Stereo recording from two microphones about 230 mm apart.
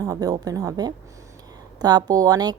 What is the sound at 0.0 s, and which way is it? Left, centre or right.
A woman's voice, centre.